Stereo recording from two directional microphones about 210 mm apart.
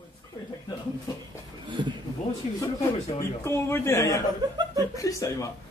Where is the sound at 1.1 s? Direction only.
20° left (ahead or behind).